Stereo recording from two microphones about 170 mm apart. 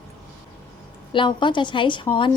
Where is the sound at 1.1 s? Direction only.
25° left (ahead or behind).